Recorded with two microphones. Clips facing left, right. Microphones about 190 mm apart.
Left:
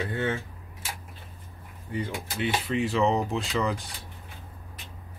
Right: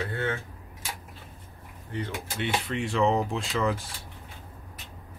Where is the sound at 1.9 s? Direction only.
10° left (ahead or behind).